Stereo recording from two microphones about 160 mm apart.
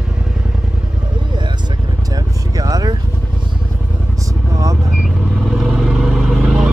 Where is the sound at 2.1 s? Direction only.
20° right (ahead or behind).